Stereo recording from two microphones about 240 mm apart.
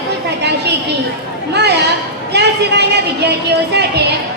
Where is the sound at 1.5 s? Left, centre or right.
Right.